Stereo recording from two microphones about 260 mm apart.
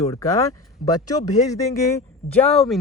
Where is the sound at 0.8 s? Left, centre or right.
Left.